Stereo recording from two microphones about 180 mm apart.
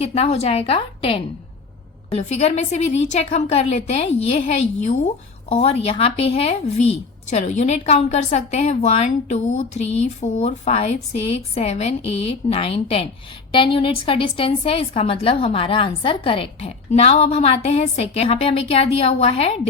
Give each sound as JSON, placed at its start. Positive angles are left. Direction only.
{"t": 0.0, "sound": "a woman's voice", "side_deg": 35}